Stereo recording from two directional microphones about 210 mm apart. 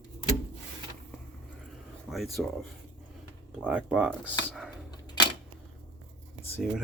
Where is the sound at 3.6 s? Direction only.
5° right (ahead or behind).